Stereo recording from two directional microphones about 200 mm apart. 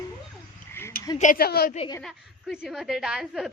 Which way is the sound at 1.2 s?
45° left (ahead or behind).